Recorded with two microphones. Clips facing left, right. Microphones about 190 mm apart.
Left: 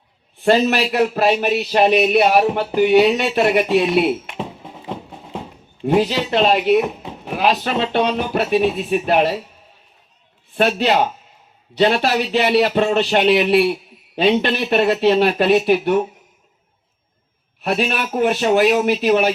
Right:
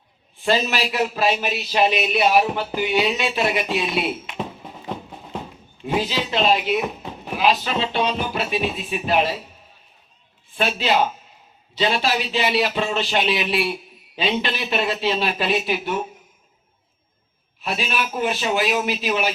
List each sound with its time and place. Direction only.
0.4 s a man's voice: 60° left (ahead or behind)
4.4 s music: 25° left (ahead or behind)
5.8 s a man's voice: 60° left (ahead or behind)
10.5 s a man's voice: 65° left (ahead or behind)
17.6 s a man's voice: 60° left (ahead or behind)